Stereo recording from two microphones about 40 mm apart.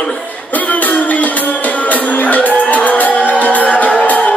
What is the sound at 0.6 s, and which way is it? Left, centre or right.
Music, left.